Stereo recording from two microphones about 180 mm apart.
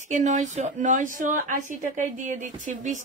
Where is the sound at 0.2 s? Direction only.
40° right (ahead or behind).